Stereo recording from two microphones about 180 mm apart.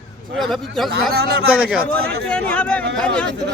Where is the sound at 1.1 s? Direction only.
65° right (ahead or behind).